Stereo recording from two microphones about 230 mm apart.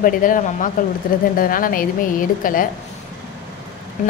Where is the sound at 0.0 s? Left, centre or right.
Left.